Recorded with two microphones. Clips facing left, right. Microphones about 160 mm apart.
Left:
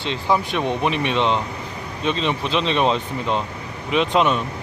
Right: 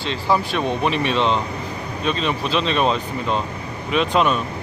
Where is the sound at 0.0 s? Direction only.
20° left (ahead or behind).